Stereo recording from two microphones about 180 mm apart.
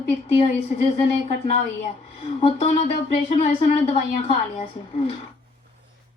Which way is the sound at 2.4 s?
35° left (ahead or behind).